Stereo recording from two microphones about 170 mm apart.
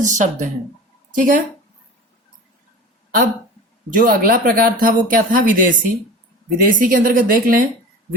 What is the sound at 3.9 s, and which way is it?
Speech, 55° right (ahead or behind).